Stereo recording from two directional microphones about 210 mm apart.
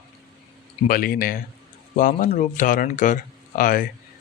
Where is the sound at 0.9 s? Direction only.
45° left (ahead or behind).